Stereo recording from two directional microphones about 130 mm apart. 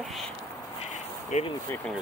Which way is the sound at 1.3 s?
70° left (ahead or behind).